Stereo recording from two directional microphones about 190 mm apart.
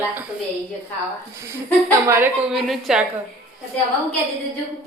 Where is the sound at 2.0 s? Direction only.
15° right (ahead or behind).